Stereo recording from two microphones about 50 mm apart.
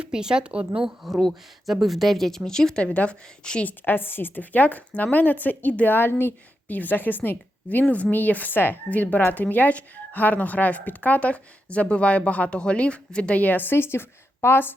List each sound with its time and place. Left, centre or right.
0.0 s speech: centre
1.6 s speech: centre
2.8 s speech: left
3.7 s a woman's voice: left
6.7 s a woman's voice: left; by 13.3 s centre
13.3 s a woman's voice: left